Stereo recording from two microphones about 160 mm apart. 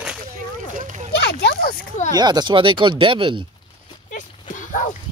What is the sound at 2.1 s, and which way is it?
Speech, 25° right (ahead or behind).